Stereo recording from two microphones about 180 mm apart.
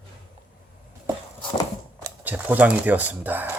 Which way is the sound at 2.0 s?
10° right (ahead or behind).